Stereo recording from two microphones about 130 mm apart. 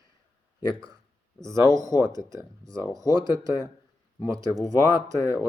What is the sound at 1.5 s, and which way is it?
Speech, 25° right (ahead or behind).